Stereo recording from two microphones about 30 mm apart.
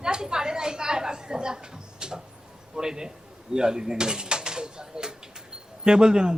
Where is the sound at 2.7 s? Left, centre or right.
Centre.